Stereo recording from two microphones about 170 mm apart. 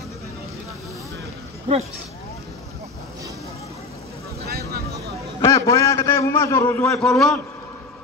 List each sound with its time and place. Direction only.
4.5 s vehicle: 65° right (ahead or behind)
5.4 s a sound: 20° left (ahead or behind)
6.9 s a man's voice: 5° left (ahead or behind)